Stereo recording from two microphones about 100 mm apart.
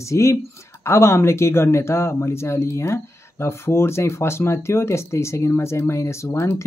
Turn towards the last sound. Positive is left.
turn(degrees=25)  # may be behind; listen again after turning